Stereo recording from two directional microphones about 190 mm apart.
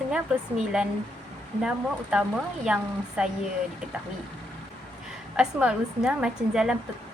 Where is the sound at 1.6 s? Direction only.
5° right (ahead or behind).